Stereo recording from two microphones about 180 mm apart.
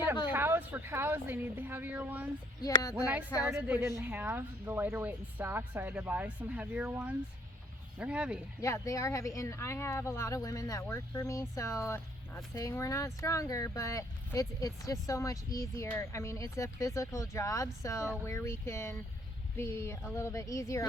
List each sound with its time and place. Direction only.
0.3 s speech: 10° right (ahead or behind)
2.6 s speech: 20° left (ahead or behind)
2.9 s speech: 5° right (ahead or behind)
8.6 s speech: 15° left (ahead or behind)